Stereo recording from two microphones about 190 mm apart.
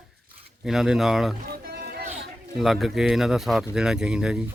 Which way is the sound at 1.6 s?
55° right (ahead or behind).